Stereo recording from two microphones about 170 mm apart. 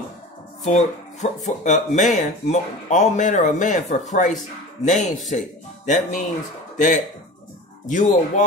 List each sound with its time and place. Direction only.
0.7 s speech: 45° left (ahead or behind)
7.9 s speech: 50° left (ahead or behind)